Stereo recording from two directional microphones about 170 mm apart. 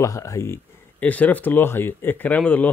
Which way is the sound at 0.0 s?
20° left (ahead or behind).